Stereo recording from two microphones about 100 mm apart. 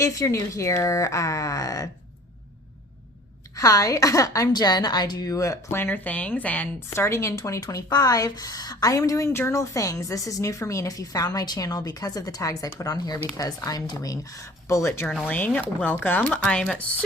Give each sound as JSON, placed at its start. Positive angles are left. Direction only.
{"t": 0.0, "sound": "a woman's voice", "side_deg": 30}
{"t": 3.5, "sound": "a woman's voice", "side_deg": 35}
{"t": 5.7, "sound": "a woman's voice", "side_deg": 20}
{"t": 15.3, "sound": "speech", "side_deg": 15}